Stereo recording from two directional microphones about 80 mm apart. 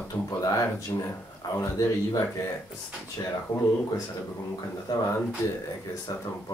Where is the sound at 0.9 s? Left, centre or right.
Left.